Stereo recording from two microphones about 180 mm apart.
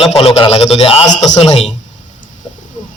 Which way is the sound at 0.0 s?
30° left (ahead or behind).